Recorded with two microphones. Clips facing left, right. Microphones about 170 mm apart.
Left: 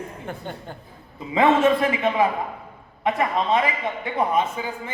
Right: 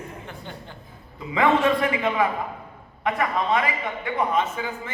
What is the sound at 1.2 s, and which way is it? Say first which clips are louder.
A man's voice: left 2 dB; 25° left (ahead or behind).